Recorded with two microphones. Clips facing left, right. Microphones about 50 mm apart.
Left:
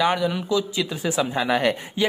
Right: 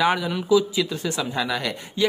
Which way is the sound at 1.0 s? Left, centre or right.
Centre.